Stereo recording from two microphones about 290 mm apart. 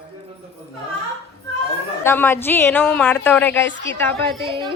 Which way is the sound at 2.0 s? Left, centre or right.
Centre.